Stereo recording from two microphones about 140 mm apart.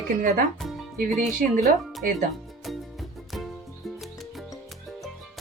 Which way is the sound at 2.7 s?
Centre (ahead or behind).